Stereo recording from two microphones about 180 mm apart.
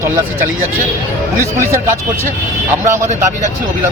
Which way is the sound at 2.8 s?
15° right (ahead or behind).